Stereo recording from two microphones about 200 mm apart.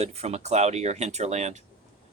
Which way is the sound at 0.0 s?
30° right (ahead or behind).